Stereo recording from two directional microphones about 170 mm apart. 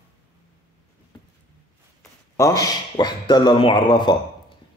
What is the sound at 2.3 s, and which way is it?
Speech, 20° left (ahead or behind).